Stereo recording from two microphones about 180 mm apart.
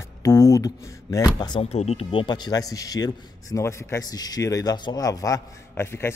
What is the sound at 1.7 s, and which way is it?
A man's voice, 35° left (ahead or behind).